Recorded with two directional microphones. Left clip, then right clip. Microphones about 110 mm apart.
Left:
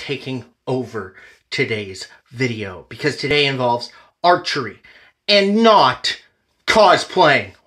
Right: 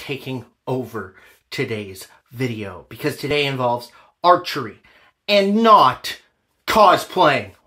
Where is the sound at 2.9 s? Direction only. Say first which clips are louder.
Left 4 dB; 30° right (ahead or behind).